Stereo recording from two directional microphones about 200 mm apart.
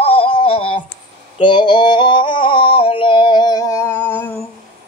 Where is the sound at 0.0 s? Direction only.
30° left (ahead or behind); by 4.4 s 10° left (ahead or behind).